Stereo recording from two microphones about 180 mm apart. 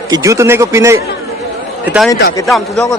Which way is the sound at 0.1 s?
15° right (ahead or behind).